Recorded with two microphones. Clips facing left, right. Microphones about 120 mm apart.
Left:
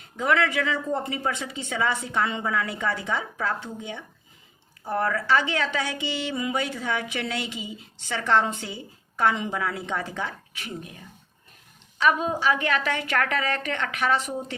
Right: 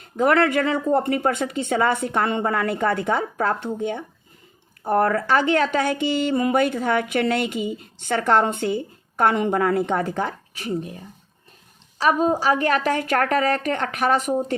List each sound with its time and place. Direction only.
0.0 s speech: 50° right (ahead or behind)